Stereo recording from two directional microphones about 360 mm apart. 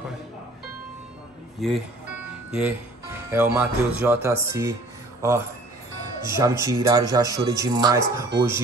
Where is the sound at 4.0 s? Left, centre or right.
Centre.